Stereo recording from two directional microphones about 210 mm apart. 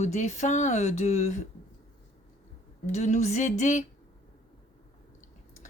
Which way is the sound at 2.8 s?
35° left (ahead or behind).